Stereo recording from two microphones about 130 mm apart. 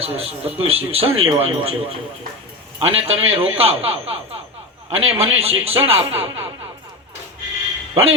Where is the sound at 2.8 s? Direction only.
50° right (ahead or behind).